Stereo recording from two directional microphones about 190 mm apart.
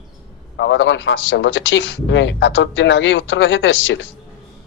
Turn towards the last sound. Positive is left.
turn(degrees=85)